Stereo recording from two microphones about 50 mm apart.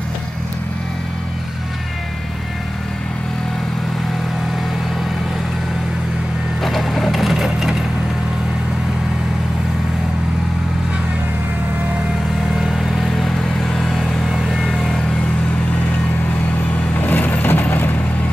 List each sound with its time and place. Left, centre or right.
6.6 s sewing machine: centre
12.5 s vehicle: centre
13.7 s vehicle: centre
16.9 s vehicle: left